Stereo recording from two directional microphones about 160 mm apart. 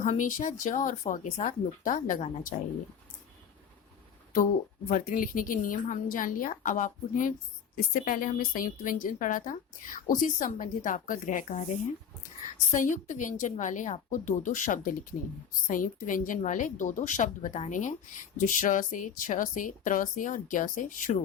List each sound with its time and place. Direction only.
0.0 s speech: 55° left (ahead or behind)
4.9 s a woman's voice: 60° left (ahead or behind)